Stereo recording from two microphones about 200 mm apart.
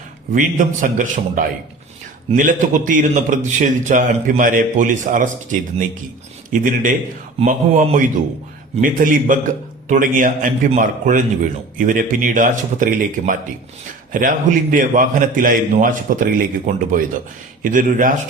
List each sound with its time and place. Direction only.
0.3 s a man's voice: 40° right (ahead or behind)